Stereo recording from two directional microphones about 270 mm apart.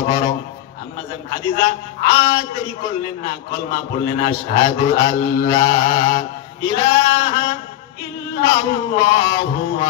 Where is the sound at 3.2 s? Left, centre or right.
Centre.